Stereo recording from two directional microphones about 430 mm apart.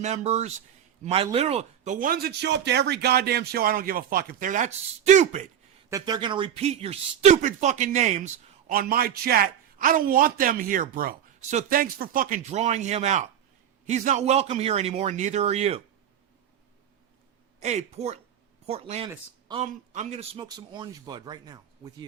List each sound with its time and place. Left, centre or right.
0.0 s a man's voice: centre
17.6 s speech: centre